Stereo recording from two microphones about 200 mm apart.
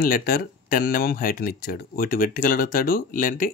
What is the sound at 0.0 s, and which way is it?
Speech, 45° left (ahead or behind).